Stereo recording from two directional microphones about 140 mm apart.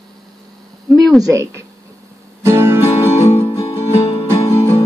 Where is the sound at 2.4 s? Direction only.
15° right (ahead or behind).